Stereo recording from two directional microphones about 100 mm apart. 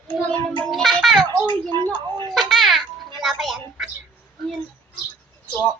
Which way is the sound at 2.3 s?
Centre (ahead or behind).